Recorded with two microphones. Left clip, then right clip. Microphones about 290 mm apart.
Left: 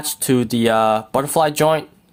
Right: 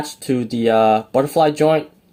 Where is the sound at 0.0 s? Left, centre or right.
Left.